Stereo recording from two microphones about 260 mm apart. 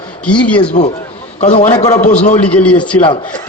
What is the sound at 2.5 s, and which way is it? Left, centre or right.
Speech, centre.